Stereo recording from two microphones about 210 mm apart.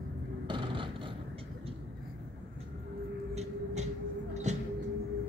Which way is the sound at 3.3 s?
30° right (ahead or behind).